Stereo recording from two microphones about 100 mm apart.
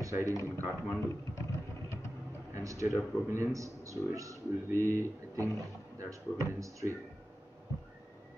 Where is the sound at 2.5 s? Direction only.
30° right (ahead or behind).